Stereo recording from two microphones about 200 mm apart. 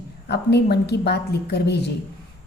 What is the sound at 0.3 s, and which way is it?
A woman's voice, 55° left (ahead or behind).